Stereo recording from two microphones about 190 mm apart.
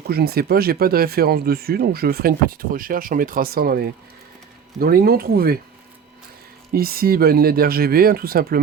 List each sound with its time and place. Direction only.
0.1 s speech: 55° right (ahead or behind)
6.7 s speech: 50° right (ahead or behind)